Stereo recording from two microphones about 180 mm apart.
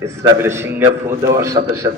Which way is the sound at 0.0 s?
15° right (ahead or behind).